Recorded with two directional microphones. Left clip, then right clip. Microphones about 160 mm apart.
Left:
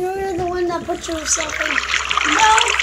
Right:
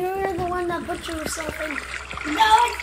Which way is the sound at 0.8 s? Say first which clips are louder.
Left 6 dB; centre (ahead or behind).